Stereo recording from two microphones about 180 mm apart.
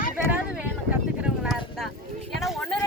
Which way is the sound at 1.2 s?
5° right (ahead or behind).